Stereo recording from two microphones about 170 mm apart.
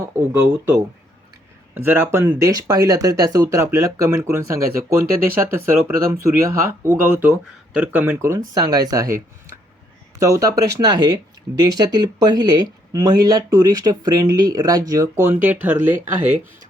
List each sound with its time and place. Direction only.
0.0 s speech: 15° right (ahead or behind)